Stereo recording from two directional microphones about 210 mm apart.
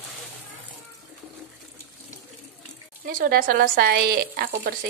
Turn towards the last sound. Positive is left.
turn(degrees=-45)  # may be behind; listen again after turning